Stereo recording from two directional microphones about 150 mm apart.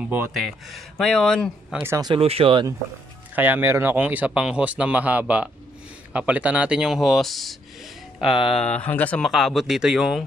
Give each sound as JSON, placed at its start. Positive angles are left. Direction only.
{"t": 0.0, "sound": "speech", "side_deg": -10}
{"t": 0.3, "sound": "speech", "side_deg": 0}
{"t": 1.7, "sound": "speech", "side_deg": -15}
{"t": 2.1, "sound": "speech", "side_deg": -40}
{"t": 3.3, "sound": "speech", "side_deg": -10}
{"t": 8.4, "sound": "speech", "side_deg": 40}
{"t": 8.6, "sound": "speech", "side_deg": 10}
{"t": 9.3, "sound": "speech", "side_deg": 0}